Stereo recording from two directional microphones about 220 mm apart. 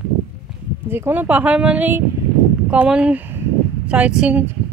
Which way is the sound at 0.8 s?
10° right (ahead or behind).